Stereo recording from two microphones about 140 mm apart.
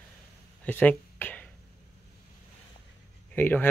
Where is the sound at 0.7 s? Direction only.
15° left (ahead or behind).